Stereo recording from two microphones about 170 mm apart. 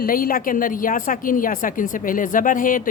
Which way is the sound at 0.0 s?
55° left (ahead or behind).